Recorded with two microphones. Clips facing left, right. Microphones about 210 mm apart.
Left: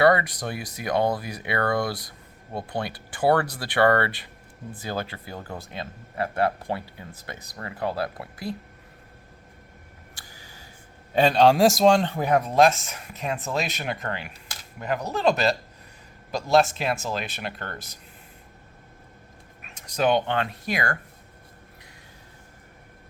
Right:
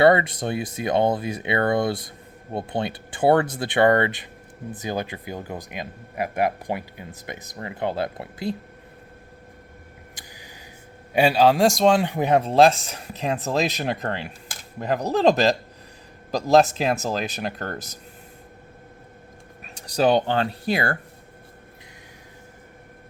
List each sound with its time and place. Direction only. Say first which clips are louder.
0.0 s speech: right 3 dB; 25° right (ahead or behind)
10.2 s a sound: right 3 dB; 15° right (ahead or behind)
11.1 s a man's voice: right 1 dB; 10° right (ahead or behind)
12.0 s speech: right 3 dB; 20° right (ahead or behind); by 17.9 s 40° right (ahead or behind)
19.6 s speech: right 3 dB; 35° right (ahead or behind)